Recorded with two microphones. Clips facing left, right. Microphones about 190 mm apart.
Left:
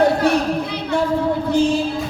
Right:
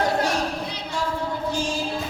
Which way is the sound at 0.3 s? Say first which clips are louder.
Left 8 dB; 60° left (ahead or behind).